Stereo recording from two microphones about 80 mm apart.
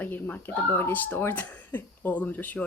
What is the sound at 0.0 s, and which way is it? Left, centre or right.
Speech, left.